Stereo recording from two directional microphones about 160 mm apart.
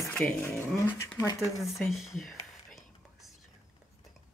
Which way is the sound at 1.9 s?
Centre (ahead or behind).